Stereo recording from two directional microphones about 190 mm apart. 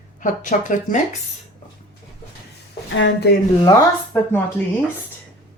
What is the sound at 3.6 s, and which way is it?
Speech, 15° left (ahead or behind).